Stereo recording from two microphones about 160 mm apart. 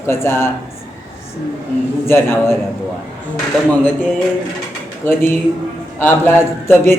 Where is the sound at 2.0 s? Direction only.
15° left (ahead or behind).